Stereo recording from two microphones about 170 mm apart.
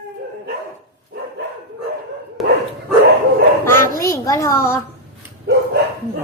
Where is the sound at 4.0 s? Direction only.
15° left (ahead or behind).